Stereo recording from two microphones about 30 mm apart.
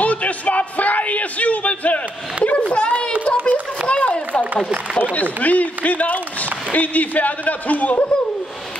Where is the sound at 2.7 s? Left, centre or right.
Left.